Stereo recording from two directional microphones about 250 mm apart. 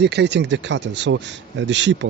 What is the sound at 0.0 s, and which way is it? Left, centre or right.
Speech, right.